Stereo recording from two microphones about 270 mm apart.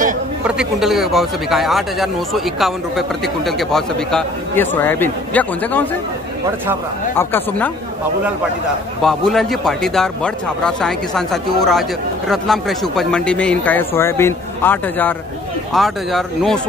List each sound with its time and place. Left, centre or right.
0.5 s speech: centre
7.2 s speech: centre
9.0 s speech: centre